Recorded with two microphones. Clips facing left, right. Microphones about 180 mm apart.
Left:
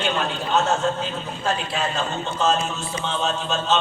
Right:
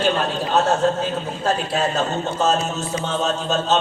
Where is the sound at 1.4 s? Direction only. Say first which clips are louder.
Right 4 dB; 40° right (ahead or behind).